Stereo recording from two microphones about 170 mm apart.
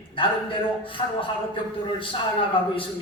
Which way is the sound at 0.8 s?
30° left (ahead or behind).